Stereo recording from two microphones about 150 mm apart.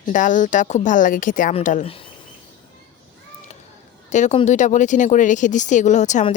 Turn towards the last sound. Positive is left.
turn(degrees=55)  # may be behind; listen again after turning